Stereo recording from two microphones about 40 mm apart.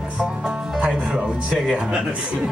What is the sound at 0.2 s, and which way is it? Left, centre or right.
Music, centre.